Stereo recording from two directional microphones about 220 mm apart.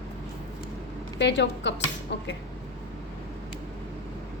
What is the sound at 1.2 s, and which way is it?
Speech, 55° left (ahead or behind).